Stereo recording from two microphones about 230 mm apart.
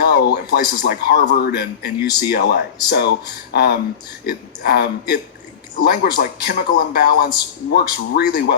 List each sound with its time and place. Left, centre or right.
0.0 s a man's voice: left